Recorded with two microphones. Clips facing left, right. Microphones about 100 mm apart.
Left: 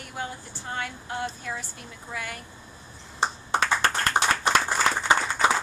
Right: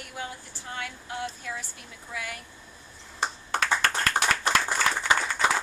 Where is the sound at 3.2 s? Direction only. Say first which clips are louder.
Left 3 dB; 25° left (ahead or behind).